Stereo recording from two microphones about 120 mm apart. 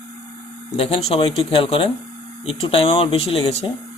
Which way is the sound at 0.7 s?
55° left (ahead or behind).